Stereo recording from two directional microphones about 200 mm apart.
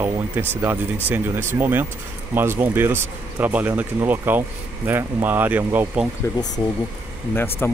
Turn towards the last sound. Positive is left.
turn(degrees=10)  # may be behind; listen again after turning